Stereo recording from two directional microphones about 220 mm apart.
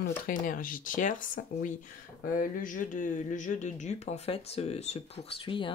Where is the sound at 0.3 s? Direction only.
40° left (ahead or behind).